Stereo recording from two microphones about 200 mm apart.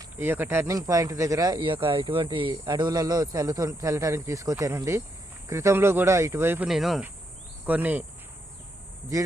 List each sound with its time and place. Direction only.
0.0 s speech: 10° right (ahead or behind)